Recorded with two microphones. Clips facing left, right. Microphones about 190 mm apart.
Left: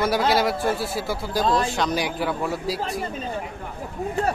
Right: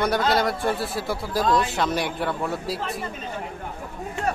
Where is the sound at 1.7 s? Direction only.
Centre (ahead or behind).